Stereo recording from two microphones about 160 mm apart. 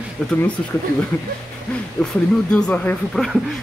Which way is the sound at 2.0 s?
5° left (ahead or behind).